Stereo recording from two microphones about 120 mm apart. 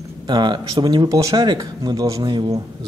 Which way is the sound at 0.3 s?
40° right (ahead or behind).